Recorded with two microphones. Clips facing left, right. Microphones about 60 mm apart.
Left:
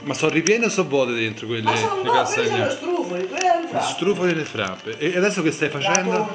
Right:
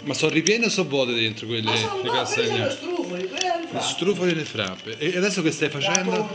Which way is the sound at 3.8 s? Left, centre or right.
Left.